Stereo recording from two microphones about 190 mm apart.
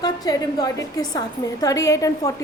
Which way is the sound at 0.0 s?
20° left (ahead or behind).